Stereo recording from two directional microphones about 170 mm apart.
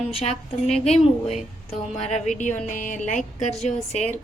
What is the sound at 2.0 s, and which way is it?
A woman's voice, 45° left (ahead or behind).